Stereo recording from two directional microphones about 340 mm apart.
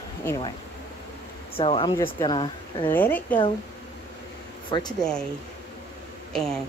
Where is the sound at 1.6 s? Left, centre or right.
Centre.